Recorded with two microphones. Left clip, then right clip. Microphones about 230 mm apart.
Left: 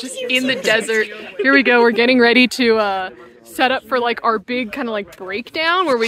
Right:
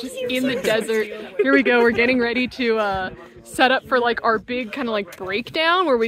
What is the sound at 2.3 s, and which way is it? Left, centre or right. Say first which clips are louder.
Speech: left 9 dB; left.